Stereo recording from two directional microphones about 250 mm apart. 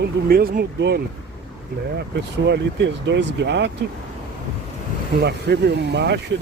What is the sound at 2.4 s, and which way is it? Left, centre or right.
Speech, right.